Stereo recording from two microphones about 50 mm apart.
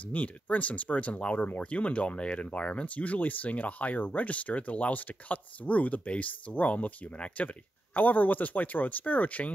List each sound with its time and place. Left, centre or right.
0.0 s speech: left